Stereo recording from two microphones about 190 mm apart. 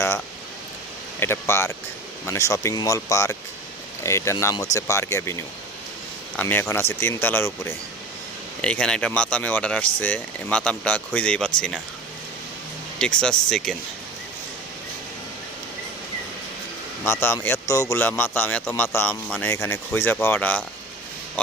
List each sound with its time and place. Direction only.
1.2 s a man's voice: 15° left (ahead or behind)
6.3 s a man's voice: 10° left (ahead or behind)
13.0 s speech: 5° left (ahead or behind)
17.1 s a man's voice: 15° left (ahead or behind)